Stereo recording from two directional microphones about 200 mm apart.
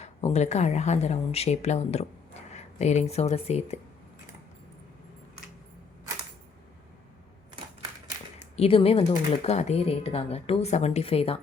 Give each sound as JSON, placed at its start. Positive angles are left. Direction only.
{"t": 0.0, "sound": "speech", "side_deg": 35}
{"t": 8.4, "sound": "speech", "side_deg": 30}